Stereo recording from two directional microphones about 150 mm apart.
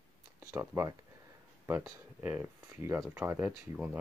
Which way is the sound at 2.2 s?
15° right (ahead or behind).